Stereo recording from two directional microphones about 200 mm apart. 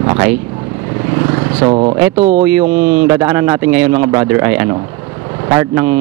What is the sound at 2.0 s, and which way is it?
A man's voice, 15° right (ahead or behind).